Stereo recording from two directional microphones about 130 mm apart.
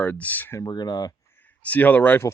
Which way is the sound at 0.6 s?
30° left (ahead or behind).